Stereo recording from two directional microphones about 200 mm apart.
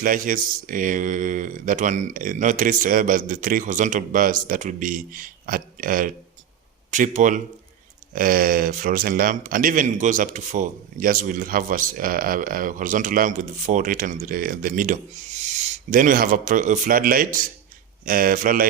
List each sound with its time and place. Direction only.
0.0 s a man's voice: 45° right (ahead or behind)